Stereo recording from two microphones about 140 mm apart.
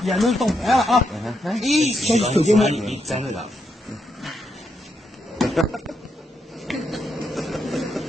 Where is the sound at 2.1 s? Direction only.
50° right (ahead or behind).